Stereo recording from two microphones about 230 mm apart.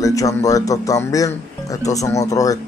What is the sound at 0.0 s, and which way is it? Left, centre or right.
Speech, centre.